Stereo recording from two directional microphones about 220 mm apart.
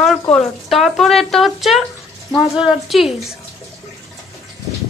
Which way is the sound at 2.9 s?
Centre (ahead or behind).